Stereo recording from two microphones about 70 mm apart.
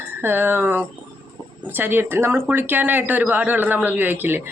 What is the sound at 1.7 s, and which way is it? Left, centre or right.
A woman's voice, right.